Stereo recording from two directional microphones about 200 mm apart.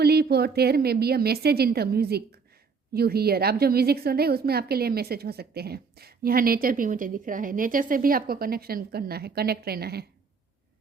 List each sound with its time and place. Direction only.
0.0 s a woman's voice: 50° right (ahead or behind)